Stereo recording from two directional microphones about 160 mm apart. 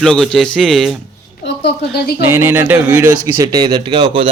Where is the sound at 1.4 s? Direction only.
90° left.